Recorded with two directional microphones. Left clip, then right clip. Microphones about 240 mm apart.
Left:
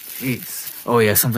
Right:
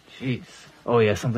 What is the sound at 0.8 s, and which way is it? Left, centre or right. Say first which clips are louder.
Speech: left 4 dB; left.